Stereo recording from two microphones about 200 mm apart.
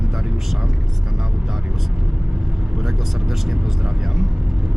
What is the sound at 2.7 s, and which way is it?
Speech, centre (ahead or behind).